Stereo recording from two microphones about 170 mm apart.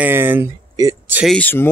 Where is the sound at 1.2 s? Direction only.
10° left (ahead or behind).